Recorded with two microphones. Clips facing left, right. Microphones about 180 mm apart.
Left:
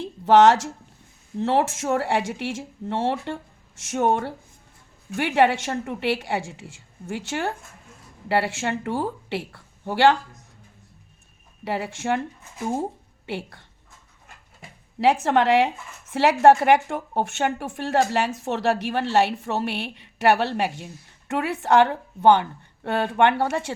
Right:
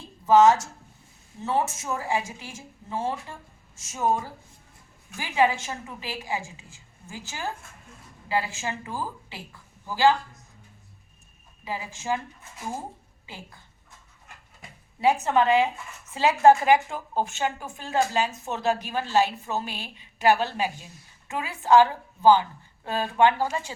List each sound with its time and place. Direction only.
0.0 s a sound: 90° left
1.4 s speech: 90° left
3.9 s a woman's voice: 70° left (ahead or behind)
11.6 s a woman's voice: 70° left (ahead or behind)
13.2 s a woman's voice: 75° left (ahead or behind)
14.9 s speech: 90° left
16.1 s a woman's voice: 75° left (ahead or behind)